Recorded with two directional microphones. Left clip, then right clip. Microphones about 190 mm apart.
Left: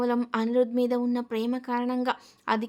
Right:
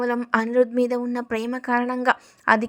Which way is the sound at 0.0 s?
25° right (ahead or behind).